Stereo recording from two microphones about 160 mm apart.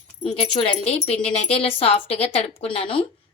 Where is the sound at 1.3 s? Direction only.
40° left (ahead or behind).